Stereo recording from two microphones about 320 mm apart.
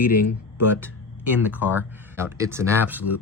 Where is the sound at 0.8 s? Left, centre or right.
Centre.